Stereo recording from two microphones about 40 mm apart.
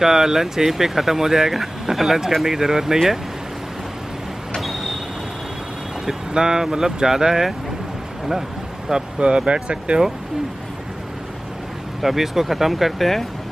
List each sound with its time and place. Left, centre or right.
0.0 s speech: centre
4.6 s vehicle: centre
6.0 s speech: centre
8.3 s a sound: centre
9.5 s speech: right
12.0 s speech: centre